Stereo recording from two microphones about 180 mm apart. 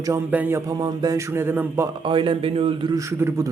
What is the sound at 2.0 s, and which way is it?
A man's voice, 30° right (ahead or behind).